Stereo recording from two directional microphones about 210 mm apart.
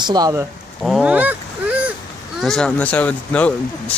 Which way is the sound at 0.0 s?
20° right (ahead or behind).